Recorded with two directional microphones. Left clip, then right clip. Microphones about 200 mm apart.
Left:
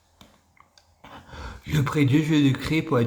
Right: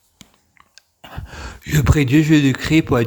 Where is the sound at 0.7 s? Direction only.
40° right (ahead or behind).